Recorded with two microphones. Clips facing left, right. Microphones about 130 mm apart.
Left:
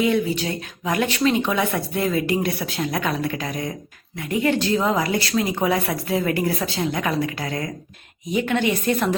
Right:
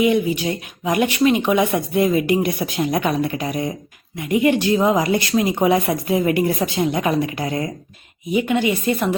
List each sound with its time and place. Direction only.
0.0 s speech: 15° right (ahead or behind)
8.3 s speech: 10° right (ahead or behind)